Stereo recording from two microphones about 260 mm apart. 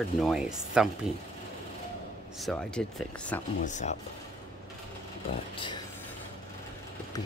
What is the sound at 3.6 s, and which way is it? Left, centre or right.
Speech, left.